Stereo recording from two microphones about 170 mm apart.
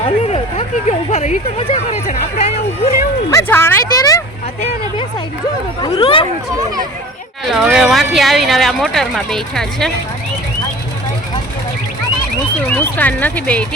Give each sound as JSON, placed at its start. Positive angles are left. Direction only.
{"t": 0.0, "sound": "a sound", "side_deg": 35}
{"t": 1.7, "sound": "speech", "side_deg": 45}
{"t": 3.2, "sound": "speech", "side_deg": 15}
{"t": 5.8, "sound": "speech", "side_deg": 30}
{"t": 6.6, "sound": "a child's voice", "side_deg": -20}
{"t": 7.4, "sound": "speech", "side_deg": -5}
{"t": 12.7, "sound": "speech", "side_deg": 10}